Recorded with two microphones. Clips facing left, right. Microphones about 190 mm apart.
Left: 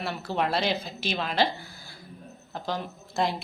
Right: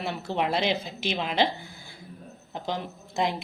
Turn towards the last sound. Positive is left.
turn(degrees=-20)  # may be behind; listen again after turning